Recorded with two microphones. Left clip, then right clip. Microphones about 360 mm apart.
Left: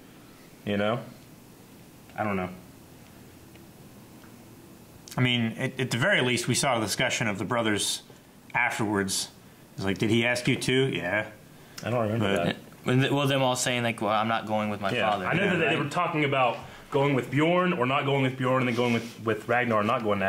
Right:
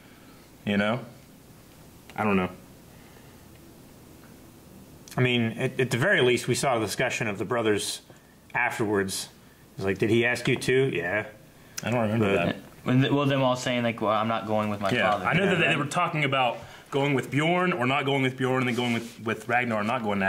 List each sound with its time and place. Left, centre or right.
0.7 s speech: left
2.1 s speech: left
5.1 s speech: centre
11.8 s speech: left
12.4 s speech: right
15.5 s speech: left